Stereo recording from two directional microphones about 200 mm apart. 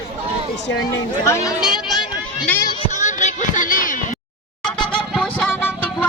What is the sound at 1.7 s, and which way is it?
Run, centre (ahead or behind).